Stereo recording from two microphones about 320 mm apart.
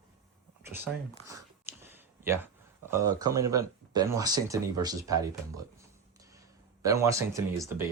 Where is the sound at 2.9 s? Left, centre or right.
Centre.